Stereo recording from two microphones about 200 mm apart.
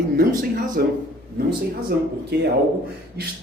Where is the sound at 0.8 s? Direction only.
50° right (ahead or behind).